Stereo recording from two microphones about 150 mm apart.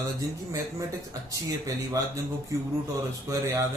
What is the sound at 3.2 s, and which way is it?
Speech, 20° right (ahead or behind).